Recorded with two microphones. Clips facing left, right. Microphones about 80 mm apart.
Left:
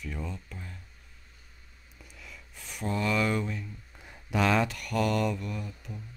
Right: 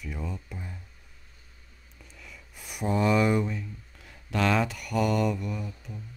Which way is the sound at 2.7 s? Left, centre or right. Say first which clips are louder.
Right 5 dB; centre.